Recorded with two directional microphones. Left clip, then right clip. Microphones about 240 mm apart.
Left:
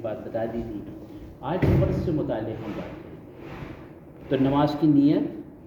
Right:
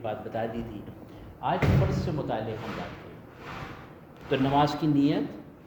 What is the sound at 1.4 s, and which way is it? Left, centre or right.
Speech, right.